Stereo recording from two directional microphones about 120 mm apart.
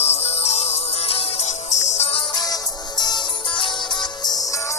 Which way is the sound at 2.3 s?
35° left (ahead or behind).